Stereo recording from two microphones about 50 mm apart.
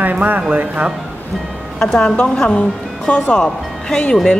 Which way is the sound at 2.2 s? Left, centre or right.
Left.